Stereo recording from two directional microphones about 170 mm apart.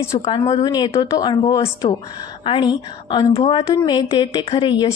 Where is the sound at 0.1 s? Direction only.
30° left (ahead or behind).